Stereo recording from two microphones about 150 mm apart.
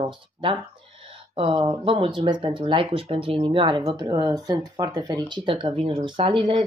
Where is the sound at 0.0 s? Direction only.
35° right (ahead or behind).